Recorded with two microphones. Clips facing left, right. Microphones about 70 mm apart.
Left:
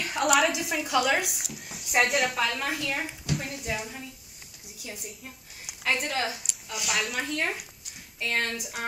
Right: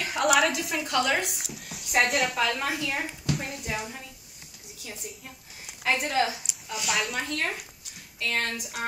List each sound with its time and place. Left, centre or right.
0.0 s a woman's voice: centre
0.5 s speech: centre
5.9 s a woman's voice: centre